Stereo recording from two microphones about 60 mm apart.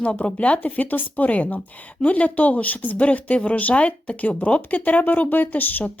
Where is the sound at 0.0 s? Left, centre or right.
Centre.